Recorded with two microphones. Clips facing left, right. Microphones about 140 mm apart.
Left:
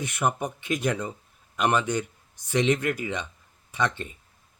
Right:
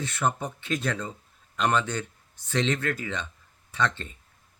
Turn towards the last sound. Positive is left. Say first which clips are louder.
# left 1 dB
turn(degrees=15)  # may be behind; listen again after turning